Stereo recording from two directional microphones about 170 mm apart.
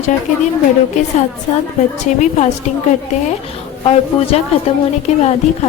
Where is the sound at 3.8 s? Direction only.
35° left (ahead or behind).